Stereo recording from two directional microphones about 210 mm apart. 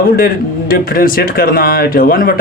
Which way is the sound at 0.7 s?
45° left (ahead or behind).